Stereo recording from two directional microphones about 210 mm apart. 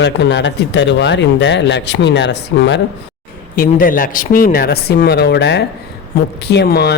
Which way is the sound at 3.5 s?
45° left (ahead or behind).